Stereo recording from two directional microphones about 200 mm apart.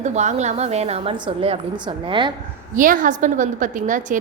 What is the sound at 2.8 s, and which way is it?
A woman's voice, 40° right (ahead or behind).